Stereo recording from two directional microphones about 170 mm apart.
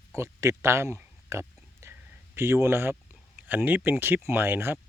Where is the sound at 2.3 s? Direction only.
15° right (ahead or behind).